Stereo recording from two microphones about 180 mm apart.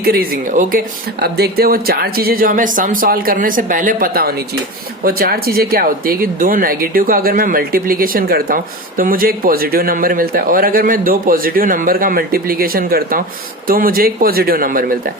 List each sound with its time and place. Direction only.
0.0 s speech: 55° right (ahead or behind)
1.2 s speech: 60° right (ahead or behind)